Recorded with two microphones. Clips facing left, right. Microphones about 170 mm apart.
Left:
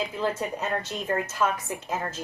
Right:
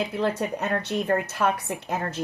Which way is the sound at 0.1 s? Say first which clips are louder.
Right 3 dB; 65° right (ahead or behind).